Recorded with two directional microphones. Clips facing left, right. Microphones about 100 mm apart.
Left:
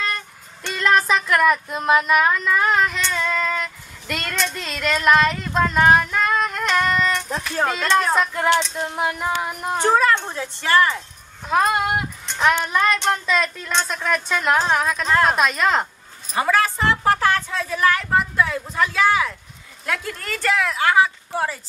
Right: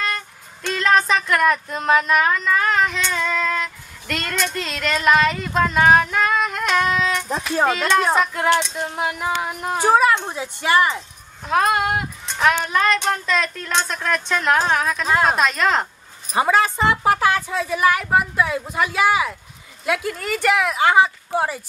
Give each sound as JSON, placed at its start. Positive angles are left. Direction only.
{"t": 0.7, "sound": "speech", "side_deg": 5}
{"t": 3.1, "sound": "female singing", "side_deg": 0}
{"t": 7.6, "sound": "speech", "side_deg": -5}
{"t": 9.8, "sound": "speech", "side_deg": -10}
{"t": 11.4, "sound": "a child's voice", "side_deg": 0}
{"t": 16.3, "sound": "a woman's voice", "side_deg": -20}